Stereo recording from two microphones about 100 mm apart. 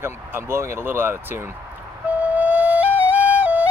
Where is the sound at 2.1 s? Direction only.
15° right (ahead or behind).